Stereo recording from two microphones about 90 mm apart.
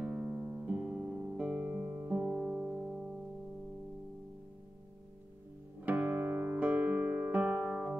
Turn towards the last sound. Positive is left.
turn(degrees=-20)  # may be behind; listen again after turning